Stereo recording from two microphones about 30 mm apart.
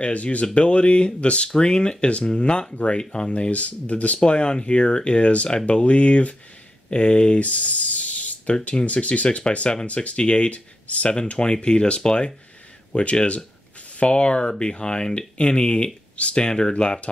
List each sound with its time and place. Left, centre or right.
0.0 s speech: left
0.6 s speech: left
1.5 s speech: left
2.7 s speech: left
3.0 s speech: left
3.3 s speech: left
4.2 s speech: left
7.3 s a sound: left
8.8 s speech: left
11.1 s speech: left
16.2 s speech: left
16.4 s speech: left